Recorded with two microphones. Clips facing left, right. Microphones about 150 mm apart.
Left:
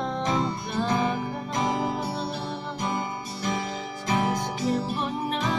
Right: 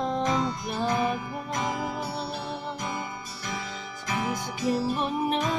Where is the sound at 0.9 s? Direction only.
30° left (ahead or behind).